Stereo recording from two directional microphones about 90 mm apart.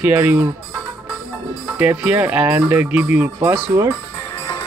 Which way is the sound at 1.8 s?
20° right (ahead or behind).